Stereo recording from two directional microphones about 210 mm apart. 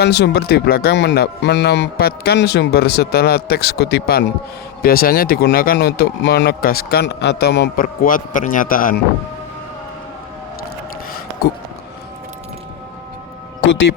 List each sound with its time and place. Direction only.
0.0 s a man's voice: 50° left (ahead or behind)